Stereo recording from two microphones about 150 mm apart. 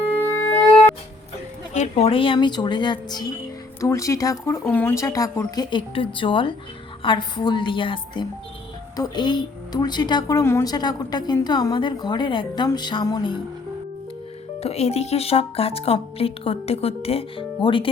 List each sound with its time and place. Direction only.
1.7 s speech: 45° left (ahead or behind); by 5.6 s 20° left (ahead or behind)
5.7 s speech: 35° left (ahead or behind)
14.6 s speech: 45° left (ahead or behind)